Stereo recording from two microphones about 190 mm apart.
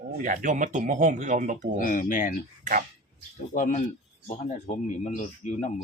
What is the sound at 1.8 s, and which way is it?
Speech, 45° left (ahead or behind).